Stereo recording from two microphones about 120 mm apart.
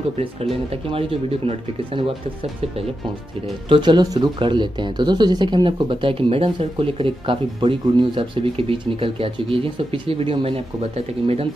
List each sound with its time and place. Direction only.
0.2 s speech: 55° right (ahead or behind)
3.6 s speech: 45° right (ahead or behind)